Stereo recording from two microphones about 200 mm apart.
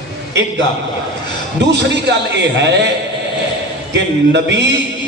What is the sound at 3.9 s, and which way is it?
Speech, 60° right (ahead or behind).